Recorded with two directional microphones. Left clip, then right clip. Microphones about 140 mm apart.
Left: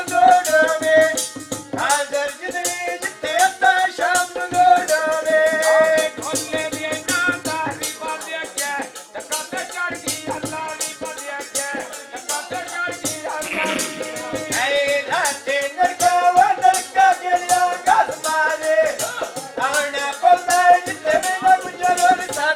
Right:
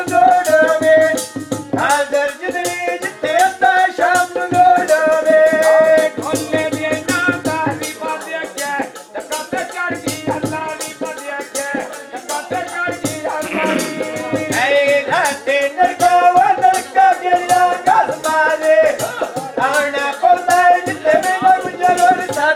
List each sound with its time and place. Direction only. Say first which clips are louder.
0.0 s music: right 2 dB; 10° right (ahead or behind)
4.9 s music: right 6 dB; 25° right (ahead or behind)
5.9 s music: right 6 dB; 10° right (ahead or behind)
7.6 s music: right 5 dB; 25° right (ahead or behind)
12.3 s music: right 5 dB; 10° right (ahead or behind)